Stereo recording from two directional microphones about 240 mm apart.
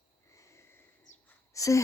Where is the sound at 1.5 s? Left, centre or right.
Centre.